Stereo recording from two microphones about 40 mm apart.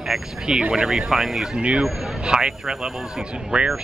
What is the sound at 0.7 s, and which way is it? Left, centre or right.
Speech, centre.